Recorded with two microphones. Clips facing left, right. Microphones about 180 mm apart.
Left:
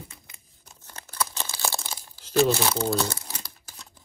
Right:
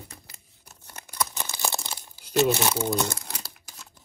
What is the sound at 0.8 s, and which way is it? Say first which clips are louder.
Crumpling: even; 15° right (ahead or behind).